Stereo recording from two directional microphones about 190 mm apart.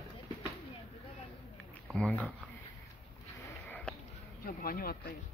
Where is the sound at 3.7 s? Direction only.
5° left (ahead or behind).